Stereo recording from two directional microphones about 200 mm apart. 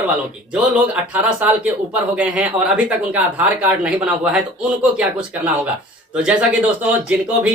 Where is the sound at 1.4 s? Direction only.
5° right (ahead or behind).